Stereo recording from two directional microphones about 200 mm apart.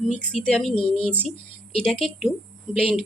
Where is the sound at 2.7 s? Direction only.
40° right (ahead or behind).